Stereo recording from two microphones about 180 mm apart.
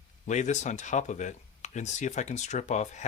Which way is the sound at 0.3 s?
40° left (ahead or behind).